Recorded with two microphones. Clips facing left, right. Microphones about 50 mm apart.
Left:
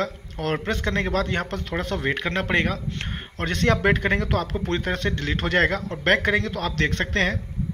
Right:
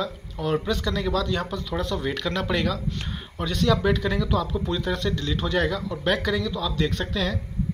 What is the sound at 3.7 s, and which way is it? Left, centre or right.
Speech, left.